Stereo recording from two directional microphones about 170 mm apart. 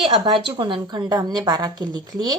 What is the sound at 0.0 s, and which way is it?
A woman's voice, 30° right (ahead or behind).